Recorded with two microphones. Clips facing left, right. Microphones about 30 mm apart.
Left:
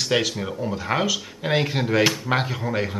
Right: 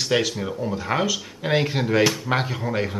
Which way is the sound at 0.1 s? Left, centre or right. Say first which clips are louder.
Right 1 dB; centre.